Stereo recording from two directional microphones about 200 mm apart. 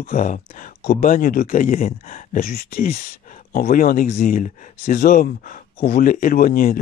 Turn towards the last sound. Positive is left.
turn(degrees=45)  # may be behind; listen again after turning